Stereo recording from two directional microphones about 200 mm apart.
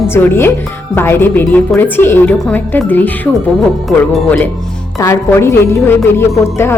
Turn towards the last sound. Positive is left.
turn(degrees=15)  # may be behind; listen again after turning